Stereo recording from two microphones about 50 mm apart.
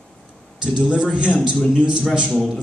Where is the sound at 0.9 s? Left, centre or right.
Right.